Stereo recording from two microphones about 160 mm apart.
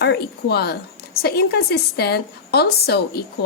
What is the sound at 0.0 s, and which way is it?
A woman's voice, 90° left.